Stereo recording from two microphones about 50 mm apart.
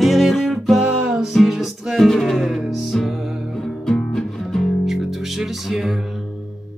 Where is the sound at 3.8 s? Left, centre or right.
Centre.